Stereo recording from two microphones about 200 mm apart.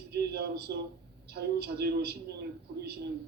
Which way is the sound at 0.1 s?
55° right (ahead or behind).